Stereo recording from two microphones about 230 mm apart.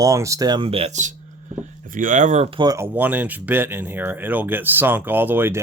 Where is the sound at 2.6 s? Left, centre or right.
Centre.